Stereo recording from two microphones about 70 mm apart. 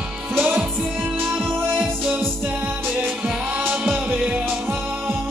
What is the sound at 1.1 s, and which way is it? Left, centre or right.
Music, right.